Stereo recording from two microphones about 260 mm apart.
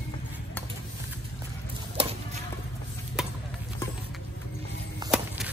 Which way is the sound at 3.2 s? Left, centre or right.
Centre.